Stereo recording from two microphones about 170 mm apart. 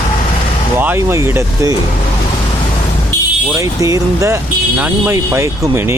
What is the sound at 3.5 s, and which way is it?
Speech, 20° right (ahead or behind).